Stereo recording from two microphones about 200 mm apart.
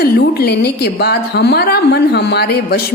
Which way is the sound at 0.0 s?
50° left (ahead or behind).